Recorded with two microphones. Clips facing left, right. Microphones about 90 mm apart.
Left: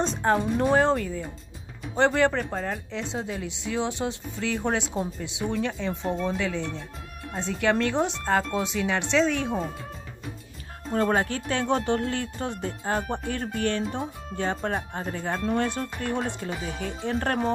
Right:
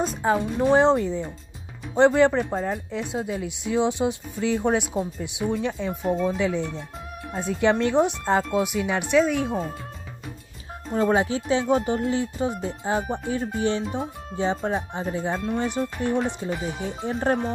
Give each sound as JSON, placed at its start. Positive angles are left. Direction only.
{"t": 0.0, "sound": "speech", "side_deg": -5}
{"t": 0.7, "sound": "speech", "side_deg": -20}
{"t": 10.9, "sound": "speech", "side_deg": -10}